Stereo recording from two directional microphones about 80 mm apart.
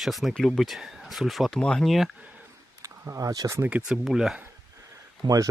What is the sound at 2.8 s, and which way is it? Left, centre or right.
Speech, right.